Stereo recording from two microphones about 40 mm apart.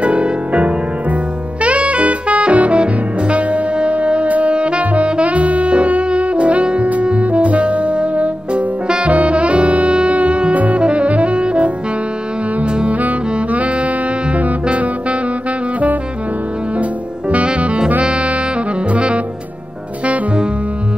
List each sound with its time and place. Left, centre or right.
0.0 s music: right
2.8 s wind instrument: right
9.1 s saxophone: right
9.9 s music: right
10.8 s saxophone: right
12.6 s music: right
13.0 s music: right
17.3 s music: right
18.0 s saxophone: right